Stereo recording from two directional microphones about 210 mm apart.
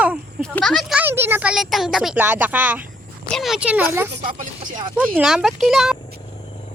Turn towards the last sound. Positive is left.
turn(degrees=0)  # may be behind; listen again after turning